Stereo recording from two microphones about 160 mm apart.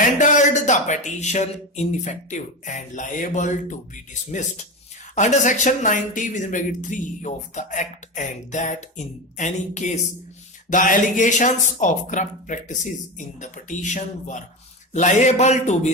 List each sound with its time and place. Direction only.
0.0 s speech: 50° left (ahead or behind)